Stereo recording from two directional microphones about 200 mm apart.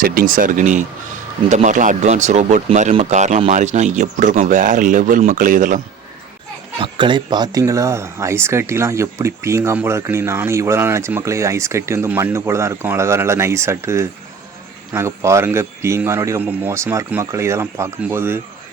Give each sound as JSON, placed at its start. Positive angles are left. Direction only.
{"t": 0.0, "sound": "speech", "side_deg": -45}
{"t": 6.7, "sound": "speech", "side_deg": -25}